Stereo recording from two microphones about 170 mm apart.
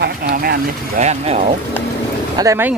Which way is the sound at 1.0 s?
40° right (ahead or behind).